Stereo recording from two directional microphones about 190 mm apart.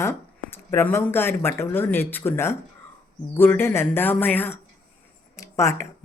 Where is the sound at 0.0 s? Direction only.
10° left (ahead or behind).